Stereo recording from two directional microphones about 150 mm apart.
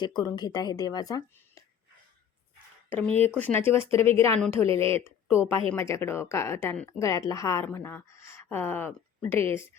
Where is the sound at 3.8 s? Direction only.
40° right (ahead or behind).